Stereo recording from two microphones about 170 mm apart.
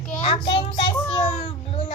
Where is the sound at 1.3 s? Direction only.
35° left (ahead or behind).